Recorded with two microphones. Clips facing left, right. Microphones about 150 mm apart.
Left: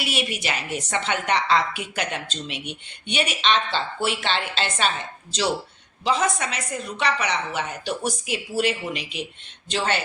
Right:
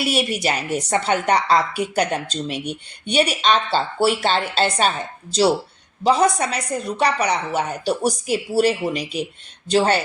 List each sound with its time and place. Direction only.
0.0 s a woman's voice: 40° right (ahead or behind)